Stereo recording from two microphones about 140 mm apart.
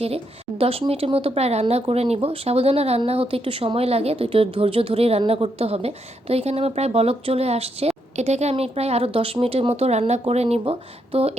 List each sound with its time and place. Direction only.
0.6 s a woman's voice: 45° right (ahead or behind)